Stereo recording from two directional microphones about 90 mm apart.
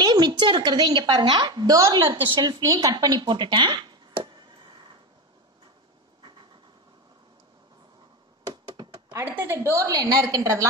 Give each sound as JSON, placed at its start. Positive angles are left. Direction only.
{"t": 0.0, "sound": "a woman's voice", "side_deg": -50}
{"t": 2.0, "sound": "a woman's voice", "side_deg": -60}
{"t": 8.5, "sound": "a sound", "side_deg": -50}
{"t": 9.2, "sound": "speech", "side_deg": -25}
{"t": 9.8, "sound": "a woman's voice", "side_deg": -45}
{"t": 10.3, "sound": "a man's voice", "side_deg": -35}